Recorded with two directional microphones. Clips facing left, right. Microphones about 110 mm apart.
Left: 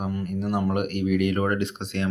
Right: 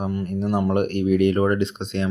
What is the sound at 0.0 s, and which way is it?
Speech, 30° right (ahead or behind).